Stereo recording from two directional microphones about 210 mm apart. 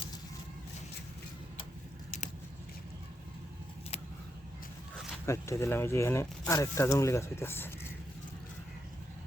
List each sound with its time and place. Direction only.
2.0 s biting: 35° left (ahead or behind)
5.2 s speech: 15° left (ahead or behind)